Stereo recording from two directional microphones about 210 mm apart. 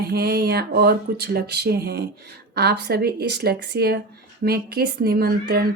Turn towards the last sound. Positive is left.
turn(degrees=-45)  # may be behind; listen again after turning